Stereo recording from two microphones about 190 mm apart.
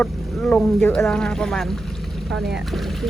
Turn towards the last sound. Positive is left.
turn(degrees=0)  # may be behind; listen again after turning